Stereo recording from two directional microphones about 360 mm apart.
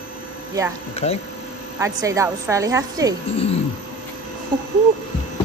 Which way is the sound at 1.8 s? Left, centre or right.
Centre.